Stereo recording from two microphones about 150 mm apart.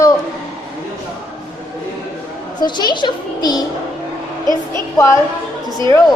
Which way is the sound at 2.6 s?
30° left (ahead or behind).